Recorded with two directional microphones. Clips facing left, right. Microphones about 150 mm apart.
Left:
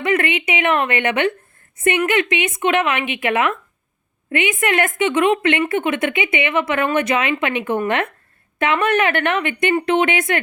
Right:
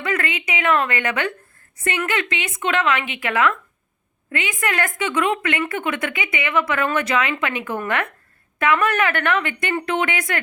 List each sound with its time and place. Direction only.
0.0 s a woman's voice: 20° left (ahead or behind)